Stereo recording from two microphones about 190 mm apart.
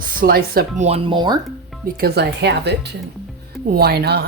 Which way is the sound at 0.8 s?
35° right (ahead or behind).